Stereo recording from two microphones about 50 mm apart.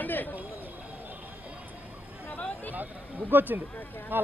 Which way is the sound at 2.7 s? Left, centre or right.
Right.